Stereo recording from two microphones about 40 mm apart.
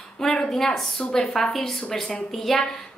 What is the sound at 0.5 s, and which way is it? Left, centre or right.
A woman's voice, centre.